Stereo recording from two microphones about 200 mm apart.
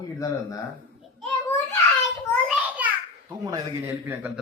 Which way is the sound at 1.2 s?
5° left (ahead or behind).